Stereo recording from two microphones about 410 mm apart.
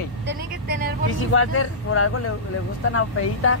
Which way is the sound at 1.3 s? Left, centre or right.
Left.